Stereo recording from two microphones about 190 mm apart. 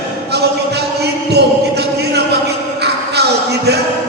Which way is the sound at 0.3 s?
60° right (ahead or behind).